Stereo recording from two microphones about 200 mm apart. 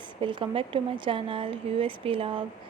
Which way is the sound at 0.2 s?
25° right (ahead or behind).